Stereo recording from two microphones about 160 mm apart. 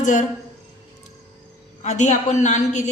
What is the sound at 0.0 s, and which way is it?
Speech, 50° left (ahead or behind).